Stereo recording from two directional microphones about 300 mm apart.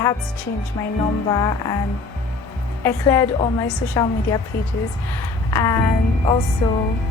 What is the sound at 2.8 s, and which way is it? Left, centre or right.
Speech, centre.